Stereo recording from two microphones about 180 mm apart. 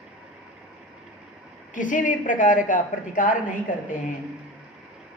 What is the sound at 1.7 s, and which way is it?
A woman's voice, 45° left (ahead or behind).